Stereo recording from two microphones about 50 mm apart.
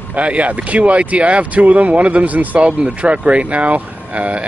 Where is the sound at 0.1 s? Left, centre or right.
Right.